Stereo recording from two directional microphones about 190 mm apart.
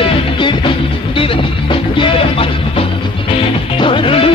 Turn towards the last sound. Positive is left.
turn(degrees=30)  # may be behind; listen again after turning